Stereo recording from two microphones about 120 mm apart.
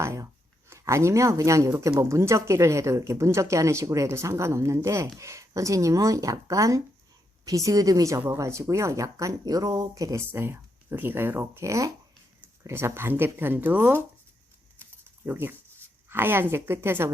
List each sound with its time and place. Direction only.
0.0 s a sound: 25° right (ahead or behind)
0.7 s speech: 25° right (ahead or behind)
15.3 s speech: 15° right (ahead or behind)